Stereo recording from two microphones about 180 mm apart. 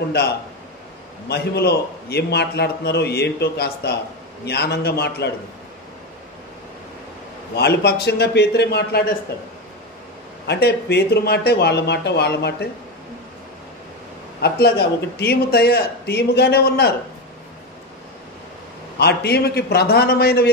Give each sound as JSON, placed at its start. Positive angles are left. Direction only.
{"t": 1.3, "sound": "a man's voice", "side_deg": 65}
{"t": 7.5, "sound": "speech", "side_deg": 65}
{"t": 10.4, "sound": "speech", "side_deg": 65}
{"t": 14.4, "sound": "a man's voice", "side_deg": 65}
{"t": 18.9, "sound": "a man's voice", "side_deg": 65}